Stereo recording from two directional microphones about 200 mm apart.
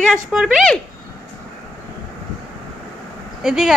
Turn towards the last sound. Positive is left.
turn(degrees=0)  # may be behind; listen again after turning